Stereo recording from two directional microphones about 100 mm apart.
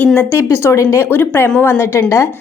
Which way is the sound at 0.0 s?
15° left (ahead or behind).